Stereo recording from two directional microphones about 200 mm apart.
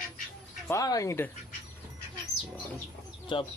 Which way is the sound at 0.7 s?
15° left (ahead or behind).